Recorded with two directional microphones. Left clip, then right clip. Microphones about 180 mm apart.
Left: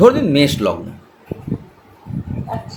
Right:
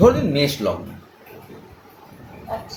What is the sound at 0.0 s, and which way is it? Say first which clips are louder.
Speech: left 4 dB; 50° left (ahead or behind).